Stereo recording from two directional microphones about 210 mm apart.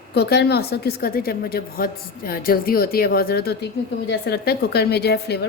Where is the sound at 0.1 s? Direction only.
50° left (ahead or behind).